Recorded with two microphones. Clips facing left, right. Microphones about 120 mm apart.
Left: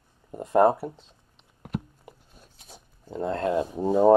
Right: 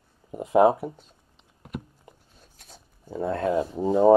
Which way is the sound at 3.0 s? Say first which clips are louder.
Right 1 dB; 5° right (ahead or behind).